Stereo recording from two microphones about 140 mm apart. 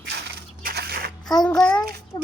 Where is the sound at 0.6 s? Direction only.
90° right.